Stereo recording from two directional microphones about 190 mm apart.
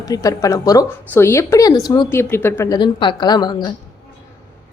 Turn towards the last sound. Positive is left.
turn(degrees=20)  # may be behind; listen again after turning